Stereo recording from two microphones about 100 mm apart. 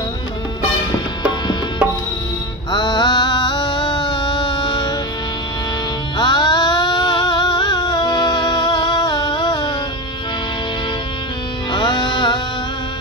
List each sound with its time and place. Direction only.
2.7 s a sound: 45° left (ahead or behind)
6.1 s music: 45° left (ahead or behind)
11.7 s music: 45° left (ahead or behind)